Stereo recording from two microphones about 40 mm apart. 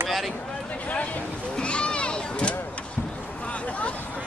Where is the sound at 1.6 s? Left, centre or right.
Left.